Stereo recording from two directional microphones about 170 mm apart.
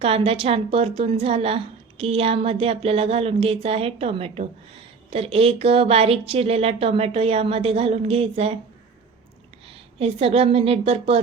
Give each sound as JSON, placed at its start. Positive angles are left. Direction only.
{"t": 0.0, "sound": "a woman's voice", "side_deg": -35}
{"t": 9.6, "sound": "a woman's voice", "side_deg": -35}